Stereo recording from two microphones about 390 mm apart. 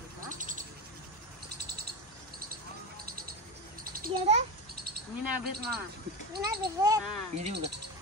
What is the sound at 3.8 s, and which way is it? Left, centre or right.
Bird, right.